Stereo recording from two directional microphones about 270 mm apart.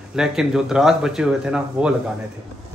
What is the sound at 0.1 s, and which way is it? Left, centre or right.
Speech, centre.